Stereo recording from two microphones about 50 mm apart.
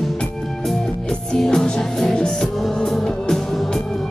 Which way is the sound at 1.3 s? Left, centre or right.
Centre.